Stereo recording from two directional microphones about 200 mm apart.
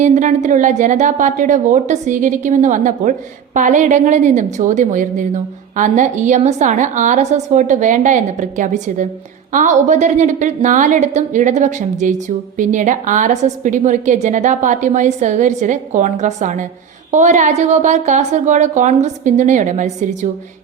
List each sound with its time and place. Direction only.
0.0 s a woman's voice: 35° right (ahead or behind)